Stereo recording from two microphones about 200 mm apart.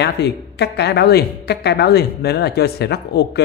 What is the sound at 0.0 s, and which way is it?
Speech, 55° left (ahead or behind).